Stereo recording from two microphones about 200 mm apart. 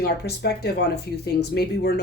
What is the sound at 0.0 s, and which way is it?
Speech, 55° left (ahead or behind).